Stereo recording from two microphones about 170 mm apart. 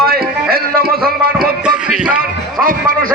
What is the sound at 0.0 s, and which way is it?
Music, 65° right (ahead or behind).